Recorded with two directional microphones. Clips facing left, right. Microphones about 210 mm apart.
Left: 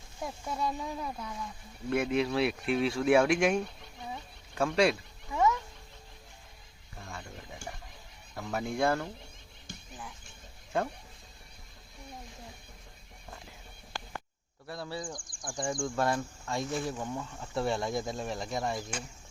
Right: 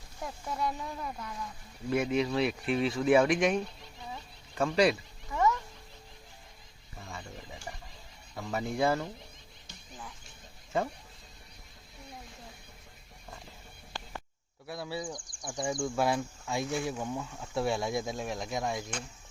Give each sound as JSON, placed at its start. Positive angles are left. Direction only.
{"t": 0.2, "sound": "speech", "side_deg": 15}
{"t": 1.9, "sound": "speech", "side_deg": 0}
{"t": 5.3, "sound": "cat", "side_deg": 10}
{"t": 7.0, "sound": "a sound", "side_deg": 0}
{"t": 8.4, "sound": "speech", "side_deg": 0}
{"t": 10.7, "sound": "speech", "side_deg": 0}
{"t": 14.7, "sound": "speech", "side_deg": -5}